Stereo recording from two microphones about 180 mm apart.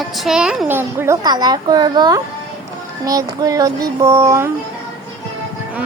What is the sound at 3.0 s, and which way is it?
Child singing, 20° right (ahead or behind).